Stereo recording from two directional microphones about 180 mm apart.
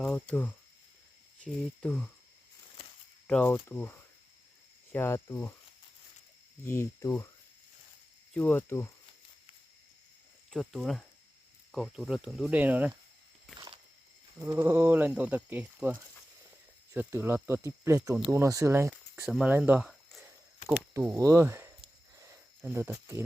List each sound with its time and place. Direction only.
0.0 s speech: 5° left (ahead or behind)
3.2 s speech: 10° left (ahead or behind)
6.7 s speech: 15° left (ahead or behind)
8.3 s speech: 10° left (ahead or behind)
10.5 s speech: centre (ahead or behind)
14.3 s speech: 10° right (ahead or behind)
21.2 s speech: 15° right (ahead or behind)